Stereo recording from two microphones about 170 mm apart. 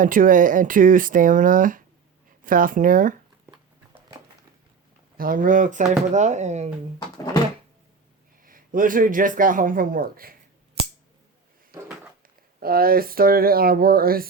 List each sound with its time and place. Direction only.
0.0 s speech: 55° right (ahead or behind)
5.1 s speech: 55° right (ahead or behind)
8.4 s speech: 55° right (ahead or behind)
12.5 s speech: 60° right (ahead or behind)